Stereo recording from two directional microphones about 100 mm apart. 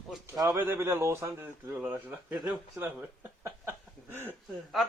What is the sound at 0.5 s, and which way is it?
A man's voice, 25° right (ahead or behind).